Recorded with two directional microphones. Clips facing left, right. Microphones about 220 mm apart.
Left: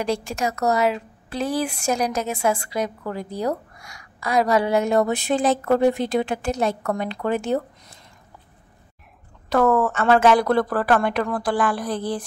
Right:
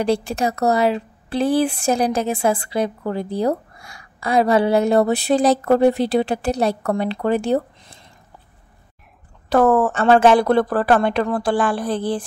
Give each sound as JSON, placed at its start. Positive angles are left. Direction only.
{"t": 0.0, "sound": "a woman's voice", "side_deg": -30}
{"t": 9.5, "sound": "speech", "side_deg": -35}